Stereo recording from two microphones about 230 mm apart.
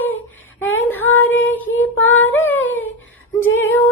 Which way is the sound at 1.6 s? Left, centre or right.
Left.